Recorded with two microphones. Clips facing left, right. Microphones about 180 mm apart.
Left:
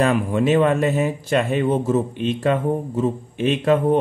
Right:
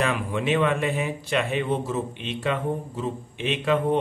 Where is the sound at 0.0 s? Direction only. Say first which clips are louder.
Left 7 dB; 40° left (ahead or behind).